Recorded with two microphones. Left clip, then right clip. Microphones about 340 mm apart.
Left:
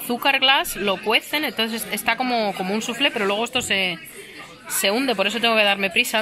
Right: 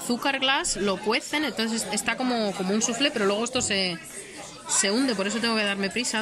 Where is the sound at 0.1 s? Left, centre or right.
Centre.